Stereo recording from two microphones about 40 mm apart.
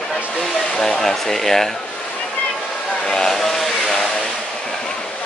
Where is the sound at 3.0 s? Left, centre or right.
Centre.